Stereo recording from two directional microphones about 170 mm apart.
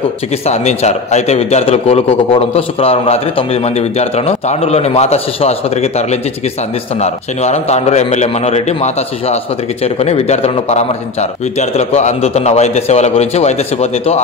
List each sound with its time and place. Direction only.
0.5 s a man's voice: 40° left (ahead or behind)